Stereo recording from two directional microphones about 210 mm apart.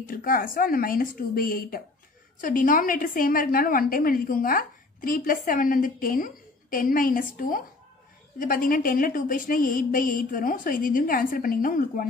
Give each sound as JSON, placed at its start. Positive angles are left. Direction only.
{"t": 0.0, "sound": "a woman's voice", "side_deg": 40}